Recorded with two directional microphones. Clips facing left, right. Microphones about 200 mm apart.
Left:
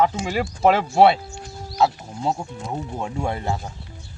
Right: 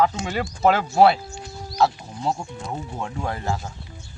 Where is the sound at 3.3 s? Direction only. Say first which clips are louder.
Left 1 dB; 25° left (ahead or behind).